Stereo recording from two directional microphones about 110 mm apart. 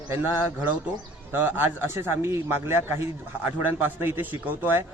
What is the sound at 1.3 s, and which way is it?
A man's voice, 20° right (ahead or behind).